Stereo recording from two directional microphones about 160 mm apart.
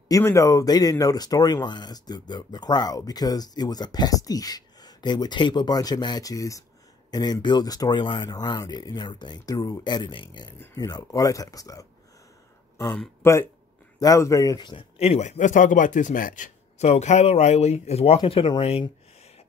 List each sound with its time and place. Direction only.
0.1 s speech: 15° left (ahead or behind)
10.6 s speech: 20° left (ahead or behind)
13.2 s a man's voice: 15° left (ahead or behind); by 19.4 s 40° left (ahead or behind)